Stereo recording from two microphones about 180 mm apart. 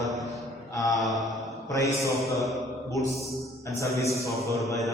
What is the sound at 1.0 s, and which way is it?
Mantra, centre (ahead or behind).